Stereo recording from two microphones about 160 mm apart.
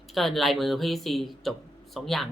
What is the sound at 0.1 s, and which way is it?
Speech, centre (ahead or behind).